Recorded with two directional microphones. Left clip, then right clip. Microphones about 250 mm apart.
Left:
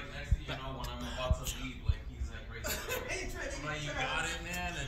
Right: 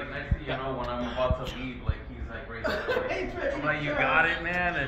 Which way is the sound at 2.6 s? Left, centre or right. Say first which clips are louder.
Right 10 dB; left.